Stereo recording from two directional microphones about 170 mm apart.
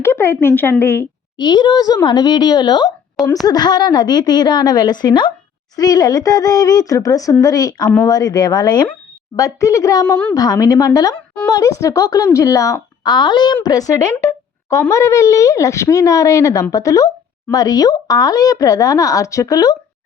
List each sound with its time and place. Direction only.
0.0 s speech: 15° left (ahead or behind)